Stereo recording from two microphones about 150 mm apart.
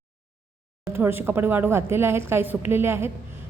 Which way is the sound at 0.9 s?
15° right (ahead or behind).